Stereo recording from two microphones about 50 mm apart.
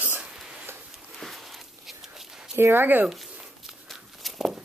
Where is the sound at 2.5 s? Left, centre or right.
Right.